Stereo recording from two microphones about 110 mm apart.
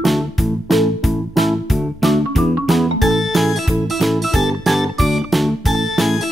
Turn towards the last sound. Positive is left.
turn(degrees=0)  # may be behind; listen again after turning